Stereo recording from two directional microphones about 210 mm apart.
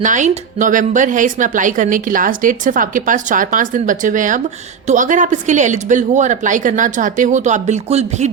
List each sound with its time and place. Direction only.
0.0 s a woman's voice: 35° right (ahead or behind)